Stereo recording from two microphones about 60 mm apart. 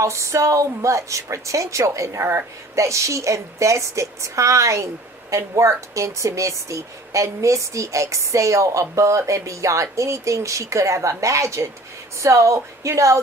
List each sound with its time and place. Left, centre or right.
0.0 s speech: right